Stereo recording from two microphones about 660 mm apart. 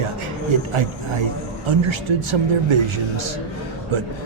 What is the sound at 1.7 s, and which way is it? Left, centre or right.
Speech, right.